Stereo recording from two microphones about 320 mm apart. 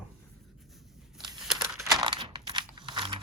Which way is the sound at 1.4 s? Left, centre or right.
Centre.